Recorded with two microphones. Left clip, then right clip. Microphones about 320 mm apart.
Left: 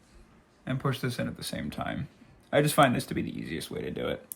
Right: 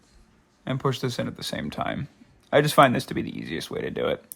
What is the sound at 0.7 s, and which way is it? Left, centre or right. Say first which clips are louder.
Speech: right 5 dB; centre.